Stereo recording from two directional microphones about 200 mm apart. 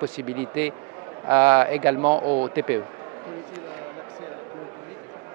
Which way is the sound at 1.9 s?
30° right (ahead or behind).